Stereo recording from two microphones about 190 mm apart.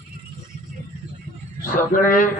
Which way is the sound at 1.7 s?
45° left (ahead or behind).